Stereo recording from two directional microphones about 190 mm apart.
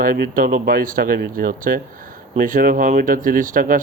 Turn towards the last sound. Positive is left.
turn(degrees=-45)  # may be behind; listen again after turning